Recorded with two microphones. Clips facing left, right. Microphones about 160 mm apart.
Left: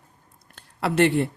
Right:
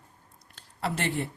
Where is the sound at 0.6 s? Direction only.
70° left (ahead or behind).